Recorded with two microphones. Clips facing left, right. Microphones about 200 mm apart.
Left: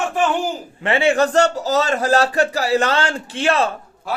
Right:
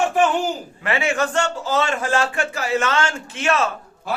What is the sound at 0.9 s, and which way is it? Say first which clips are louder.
A man's voice: left 5 dB; 30° left (ahead or behind).